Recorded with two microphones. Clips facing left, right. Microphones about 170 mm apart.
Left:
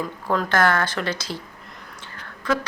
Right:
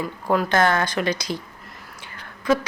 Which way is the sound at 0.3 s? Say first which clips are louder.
Right 1 dB; 15° right (ahead or behind).